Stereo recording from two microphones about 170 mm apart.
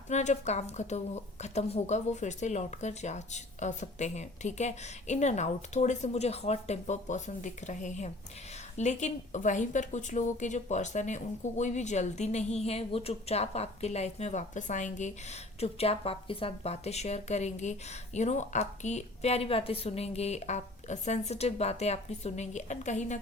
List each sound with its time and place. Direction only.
0.1 s a woman's voice: 45° left (ahead or behind)